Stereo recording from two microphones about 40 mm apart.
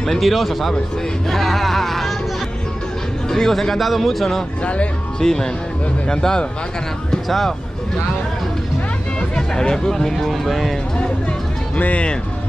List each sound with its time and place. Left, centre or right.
0.0 s speech: centre
3.3 s speech: centre
7.1 s speech: centre
9.3 s speech: centre
11.7 s speech: left